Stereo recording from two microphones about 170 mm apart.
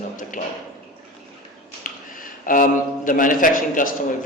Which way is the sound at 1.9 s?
50° left (ahead or behind).